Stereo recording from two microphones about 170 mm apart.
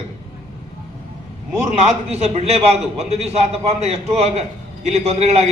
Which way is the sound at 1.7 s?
40° right (ahead or behind).